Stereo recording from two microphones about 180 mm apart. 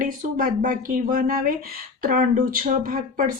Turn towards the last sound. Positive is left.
turn(degrees=-50)  # may be behind; listen again after turning